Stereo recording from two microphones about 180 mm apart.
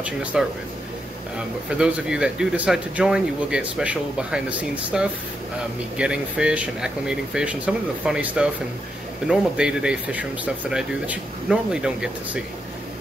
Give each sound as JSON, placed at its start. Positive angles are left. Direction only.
{"t": 0.0, "sound": "speech", "side_deg": -5}
{"t": 1.7, "sound": "speech", "side_deg": -5}